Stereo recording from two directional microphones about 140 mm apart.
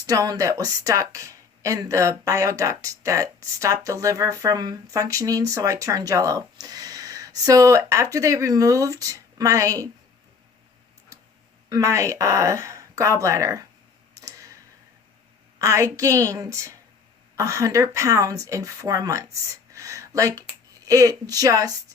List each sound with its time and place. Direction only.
0.0 s speech: 25° right (ahead or behind)
11.7 s speech: 20° right (ahead or behind)
14.1 s clicking: 25° right (ahead or behind)
15.5 s speech: 20° right (ahead or behind)